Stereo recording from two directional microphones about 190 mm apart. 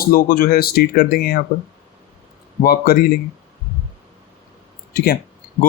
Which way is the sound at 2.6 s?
50° left (ahead or behind).